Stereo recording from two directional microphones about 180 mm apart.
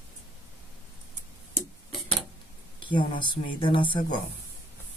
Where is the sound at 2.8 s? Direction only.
25° left (ahead or behind).